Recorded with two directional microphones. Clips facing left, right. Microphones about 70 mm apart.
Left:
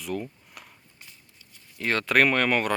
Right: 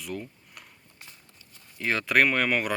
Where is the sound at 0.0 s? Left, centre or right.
Centre.